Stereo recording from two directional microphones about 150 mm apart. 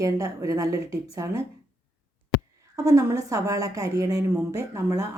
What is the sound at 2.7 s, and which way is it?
A woman's voice, 20° right (ahead or behind).